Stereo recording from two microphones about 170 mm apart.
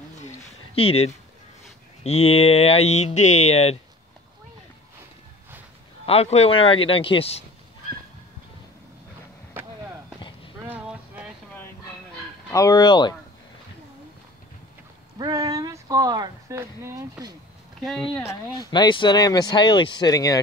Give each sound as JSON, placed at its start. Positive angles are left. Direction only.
{"t": 0.7, "sound": "speech", "side_deg": 35}
{"t": 6.0, "sound": "speech", "side_deg": 35}
{"t": 9.5, "sound": "basketball bounce", "side_deg": -10}
{"t": 10.7, "sound": "a sound", "side_deg": -10}
{"t": 12.4, "sound": "speech", "side_deg": 20}
{"t": 15.1, "sound": "speech", "side_deg": -25}
{"t": 17.7, "sound": "speech", "side_deg": 0}
{"t": 18.1, "sound": "speech", "side_deg": 15}